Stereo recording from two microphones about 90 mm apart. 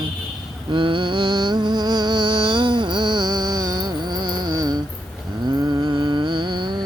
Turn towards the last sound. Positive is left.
turn(degrees=-55)  # may be behind; listen again after turning